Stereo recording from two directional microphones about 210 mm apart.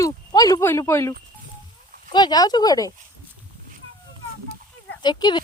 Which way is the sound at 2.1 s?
20° left (ahead or behind).